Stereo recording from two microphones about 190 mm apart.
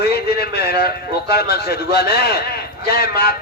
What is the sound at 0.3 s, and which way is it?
A man's voice, 55° left (ahead or behind).